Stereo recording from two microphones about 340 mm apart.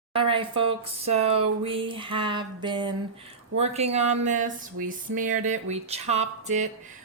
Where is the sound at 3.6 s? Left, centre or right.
Centre.